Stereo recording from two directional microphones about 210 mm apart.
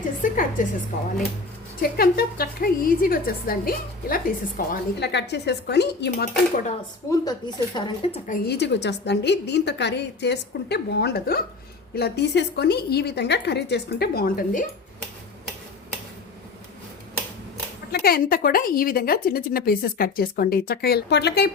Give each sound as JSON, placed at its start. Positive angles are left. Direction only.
{"t": 0.2, "sound": "a woman's voice", "side_deg": 40}
{"t": 1.8, "sound": "a woman's voice", "side_deg": 45}
{"t": 7.1, "sound": "speech", "side_deg": 20}
{"t": 8.3, "sound": "a woman's voice", "side_deg": 50}
{"t": 17.9, "sound": "a woman's voice", "side_deg": 45}